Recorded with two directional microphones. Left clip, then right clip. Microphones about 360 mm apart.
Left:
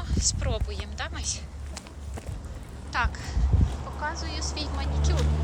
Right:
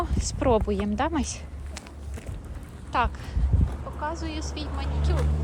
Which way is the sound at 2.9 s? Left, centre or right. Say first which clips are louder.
Right 3 dB; centre.